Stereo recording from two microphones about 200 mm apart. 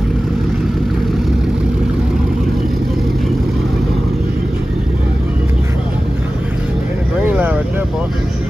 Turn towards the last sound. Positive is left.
turn(degrees=-10)  # may be behind; listen again after turning